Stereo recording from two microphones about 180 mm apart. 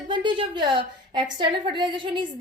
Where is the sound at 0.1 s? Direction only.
25° right (ahead or behind).